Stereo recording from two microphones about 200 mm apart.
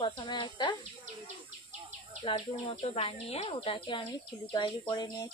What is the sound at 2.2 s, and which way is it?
A woman's voice, 25° left (ahead or behind).